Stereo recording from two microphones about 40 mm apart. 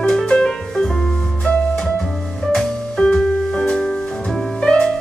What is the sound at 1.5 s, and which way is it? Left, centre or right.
Music, left.